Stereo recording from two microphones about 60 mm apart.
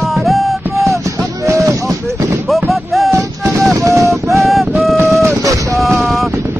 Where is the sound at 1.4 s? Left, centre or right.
Right.